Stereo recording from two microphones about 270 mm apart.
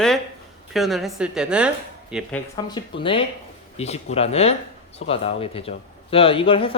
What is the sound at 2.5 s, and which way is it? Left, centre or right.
Speech, centre.